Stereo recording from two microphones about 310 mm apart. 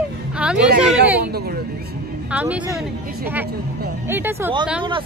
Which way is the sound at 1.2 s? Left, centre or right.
Right.